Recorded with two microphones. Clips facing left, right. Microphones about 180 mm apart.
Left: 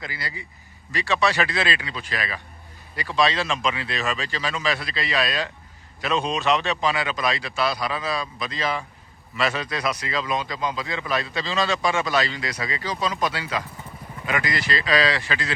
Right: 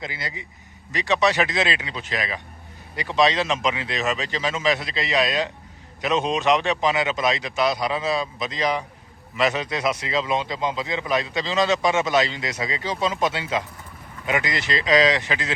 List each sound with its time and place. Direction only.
0.0 s speech: 20° right (ahead or behind)